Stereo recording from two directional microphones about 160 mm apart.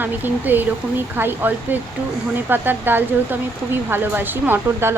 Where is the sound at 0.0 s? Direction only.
10° right (ahead or behind).